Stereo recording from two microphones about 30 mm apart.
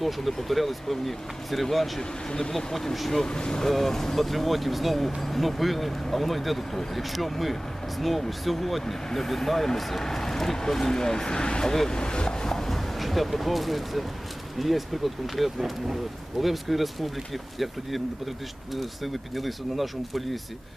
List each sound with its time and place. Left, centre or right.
0.4 s speech: centre
2.0 s speech: left
2.5 s speech: centre
3.2 s speech: left
3.7 s speech: centre
4.2 s speech: centre
10.0 s speech: centre
12.5 s a sound: centre
13.0 s speech: centre